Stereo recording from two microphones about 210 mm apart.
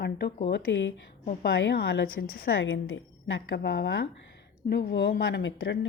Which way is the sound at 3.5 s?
50° left (ahead or behind).